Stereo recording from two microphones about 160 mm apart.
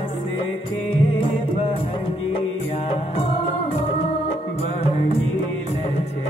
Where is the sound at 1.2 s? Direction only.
35° left (ahead or behind).